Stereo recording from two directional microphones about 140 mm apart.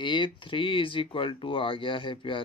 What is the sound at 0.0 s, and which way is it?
Speech, 35° left (ahead or behind).